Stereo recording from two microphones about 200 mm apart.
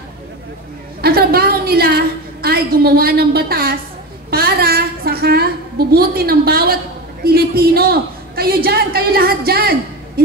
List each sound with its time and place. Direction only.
1.0 s a woman's voice: 50° right (ahead or behind)
4.3 s a sound: 50° right (ahead or behind)
7.2 s a woman's voice: 50° right (ahead or behind)